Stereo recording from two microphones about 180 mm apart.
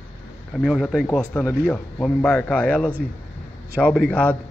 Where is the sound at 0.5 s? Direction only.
Centre (ahead or behind).